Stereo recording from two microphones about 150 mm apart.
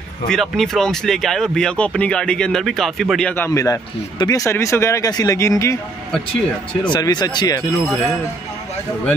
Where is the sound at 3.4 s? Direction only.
20° left (ahead or behind).